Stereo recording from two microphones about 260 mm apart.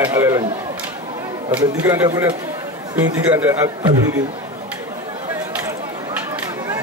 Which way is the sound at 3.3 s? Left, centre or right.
Centre.